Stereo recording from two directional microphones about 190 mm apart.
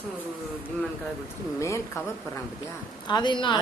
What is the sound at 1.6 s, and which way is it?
Speech, 15° left (ahead or behind).